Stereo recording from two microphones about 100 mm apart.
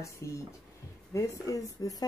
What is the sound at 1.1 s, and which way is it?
Speech, 30° left (ahead or behind).